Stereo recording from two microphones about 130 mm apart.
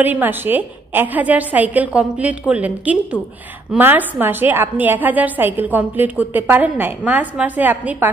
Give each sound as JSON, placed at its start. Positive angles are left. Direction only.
{"t": 0.0, "sound": "a woman's voice", "side_deg": -15}